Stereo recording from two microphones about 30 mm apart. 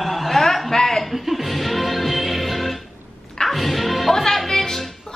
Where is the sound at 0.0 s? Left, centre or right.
Centre.